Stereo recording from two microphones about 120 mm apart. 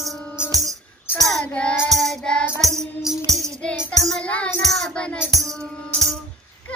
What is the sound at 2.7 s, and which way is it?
Music, centre (ahead or behind).